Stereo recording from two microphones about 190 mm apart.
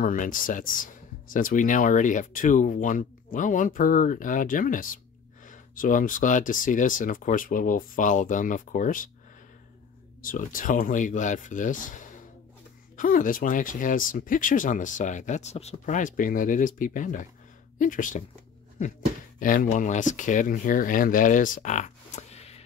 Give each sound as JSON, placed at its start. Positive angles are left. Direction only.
{"t": 0.0, "sound": "speech", "side_deg": 45}
{"t": 10.2, "sound": "speech", "side_deg": 45}
{"t": 19.4, "sound": "speech", "side_deg": 45}